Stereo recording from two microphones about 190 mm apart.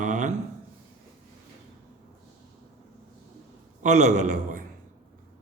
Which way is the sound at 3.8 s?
40° right (ahead or behind).